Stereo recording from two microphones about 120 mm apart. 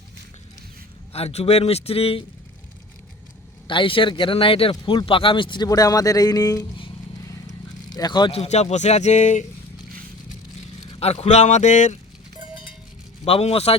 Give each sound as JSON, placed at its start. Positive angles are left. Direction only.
{"t": 1.1, "sound": "a man's voice", "side_deg": 60}
{"t": 3.7, "sound": "speech", "side_deg": 45}
{"t": 7.9, "sound": "speech", "side_deg": 35}
{"t": 8.3, "sound": "speech", "side_deg": 60}
{"t": 11.0, "sound": "speech", "side_deg": 60}
{"t": 13.2, "sound": "a man's voice", "side_deg": 55}